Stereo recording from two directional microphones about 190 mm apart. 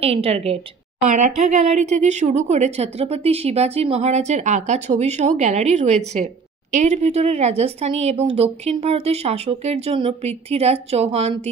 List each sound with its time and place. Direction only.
0.0 s a woman's voice: 30° right (ahead or behind)